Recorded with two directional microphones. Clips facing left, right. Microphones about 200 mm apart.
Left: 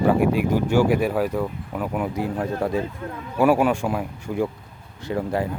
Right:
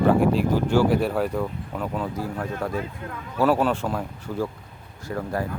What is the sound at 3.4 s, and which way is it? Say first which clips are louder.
Speech: left 3 dB; 10° left (ahead or behind).